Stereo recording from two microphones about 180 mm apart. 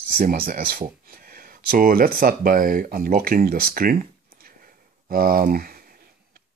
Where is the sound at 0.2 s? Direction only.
50° right (ahead or behind).